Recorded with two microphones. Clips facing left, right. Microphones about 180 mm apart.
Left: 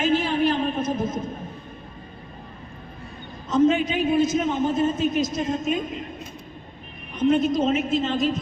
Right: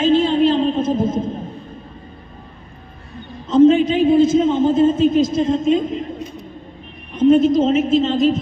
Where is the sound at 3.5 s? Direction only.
30° right (ahead or behind).